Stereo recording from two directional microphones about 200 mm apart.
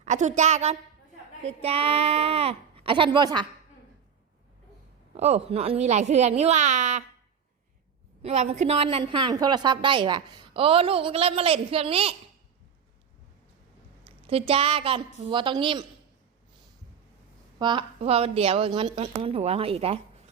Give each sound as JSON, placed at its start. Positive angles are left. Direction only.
{"t": 0.0, "sound": "a woman's voice", "side_deg": -35}
{"t": 5.1, "sound": "speech", "side_deg": -30}
{"t": 8.2, "sound": "a woman's voice", "side_deg": -35}
{"t": 14.0, "sound": "a woman's voice", "side_deg": -30}
{"t": 17.6, "sound": "a woman's voice", "side_deg": -25}